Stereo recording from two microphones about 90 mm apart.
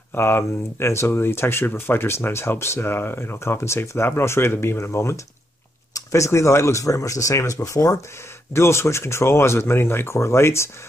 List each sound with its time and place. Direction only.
0.1 s speech: 25° left (ahead or behind)